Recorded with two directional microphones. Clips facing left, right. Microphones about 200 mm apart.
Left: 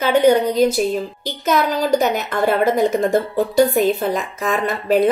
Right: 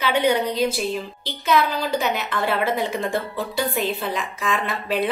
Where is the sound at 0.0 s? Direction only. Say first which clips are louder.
Left 6 dB; 45° left (ahead or behind).